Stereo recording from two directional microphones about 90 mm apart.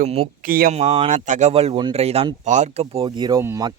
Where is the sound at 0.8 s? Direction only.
85° right.